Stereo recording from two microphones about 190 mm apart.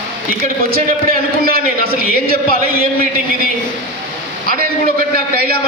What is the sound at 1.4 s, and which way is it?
A man's voice, 50° right (ahead or behind).